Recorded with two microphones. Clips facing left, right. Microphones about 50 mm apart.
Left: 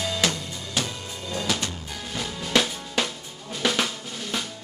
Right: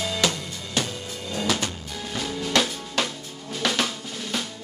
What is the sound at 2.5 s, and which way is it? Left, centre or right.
Drum, centre.